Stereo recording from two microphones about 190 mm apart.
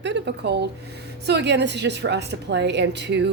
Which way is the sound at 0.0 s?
65° right (ahead or behind).